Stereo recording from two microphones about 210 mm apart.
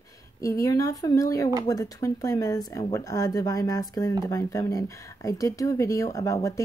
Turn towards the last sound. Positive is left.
turn(degrees=15)  # may be behind; listen again after turning